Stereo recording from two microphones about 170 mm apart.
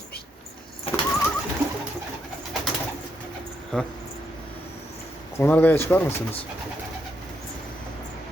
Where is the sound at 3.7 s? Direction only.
5° left (ahead or behind).